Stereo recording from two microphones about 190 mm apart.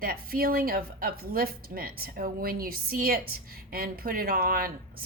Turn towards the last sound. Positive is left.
turn(degrees=-50)  # may be behind; listen again after turning